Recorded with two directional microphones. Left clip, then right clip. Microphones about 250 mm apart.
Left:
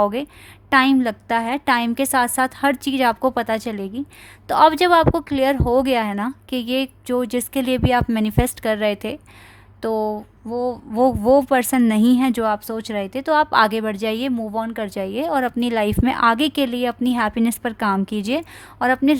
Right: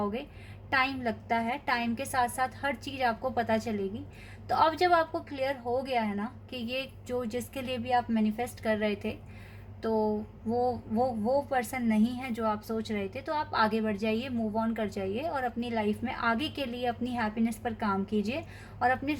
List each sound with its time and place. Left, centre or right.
0.0 s a woman's voice: left